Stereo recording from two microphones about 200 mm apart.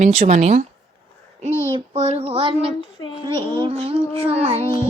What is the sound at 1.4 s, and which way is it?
Music, 30° right (ahead or behind).